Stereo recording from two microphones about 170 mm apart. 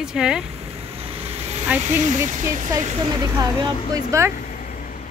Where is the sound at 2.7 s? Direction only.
20° right (ahead or behind).